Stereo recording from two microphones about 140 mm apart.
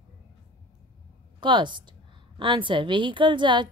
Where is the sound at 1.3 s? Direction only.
35° right (ahead or behind).